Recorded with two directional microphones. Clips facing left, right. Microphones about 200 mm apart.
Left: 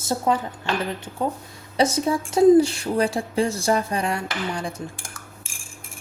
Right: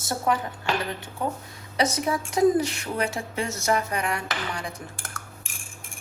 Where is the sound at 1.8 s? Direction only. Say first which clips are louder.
Left 4 dB; 30° left (ahead or behind).